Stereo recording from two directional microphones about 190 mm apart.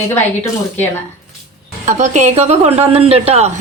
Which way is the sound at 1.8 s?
40° right (ahead or behind).